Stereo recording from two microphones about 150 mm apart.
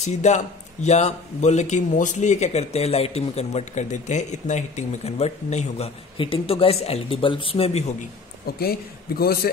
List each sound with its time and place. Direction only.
0.0 s speech: 50° left (ahead or behind)
6.1 s speech: 35° left (ahead or behind)
8.5 s a man's voice: 90° left